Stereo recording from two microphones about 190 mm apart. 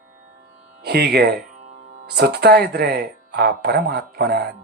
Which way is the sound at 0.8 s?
60° right (ahead or behind).